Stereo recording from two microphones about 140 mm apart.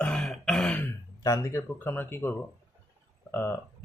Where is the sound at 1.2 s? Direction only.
20° left (ahead or behind).